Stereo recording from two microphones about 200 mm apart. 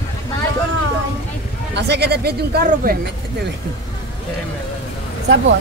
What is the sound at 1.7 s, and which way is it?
Speech, 55° right (ahead or behind).